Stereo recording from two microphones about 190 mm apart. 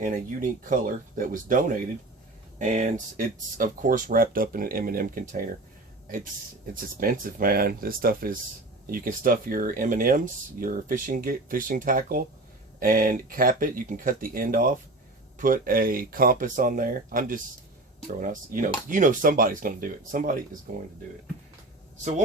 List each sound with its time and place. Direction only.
0.0 s speech: 45° right (ahead or behind)
7.0 s speech: 45° right (ahead or behind)